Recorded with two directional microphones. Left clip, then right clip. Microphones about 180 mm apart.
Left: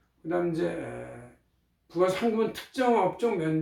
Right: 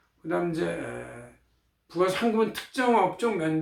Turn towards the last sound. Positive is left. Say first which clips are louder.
# right 1 dB
turn(degrees=-15)  # may be behind; listen again after turning